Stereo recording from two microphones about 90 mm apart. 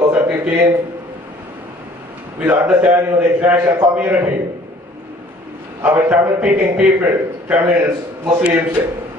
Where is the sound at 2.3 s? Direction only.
15° right (ahead or behind).